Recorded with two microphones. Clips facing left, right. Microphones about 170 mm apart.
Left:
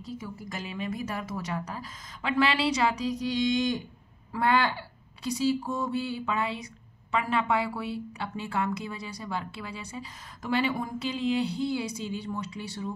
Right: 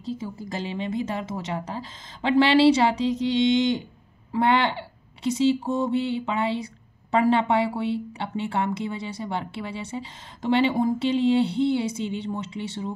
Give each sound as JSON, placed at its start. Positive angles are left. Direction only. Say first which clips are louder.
{"t": 0.0, "sound": "speech", "louder": "right 6 dB", "side_deg": -30}